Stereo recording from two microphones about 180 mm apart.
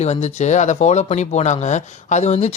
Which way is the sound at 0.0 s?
35° left (ahead or behind).